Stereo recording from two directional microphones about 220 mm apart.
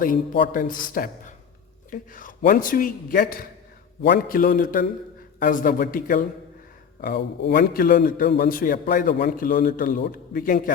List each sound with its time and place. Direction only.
0.0 s a man's voice: 45° left (ahead or behind)